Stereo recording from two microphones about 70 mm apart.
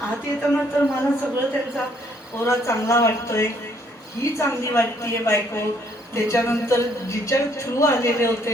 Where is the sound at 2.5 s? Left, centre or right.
Left.